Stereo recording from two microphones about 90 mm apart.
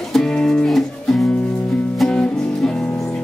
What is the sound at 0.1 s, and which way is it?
Music, 5° left (ahead or behind).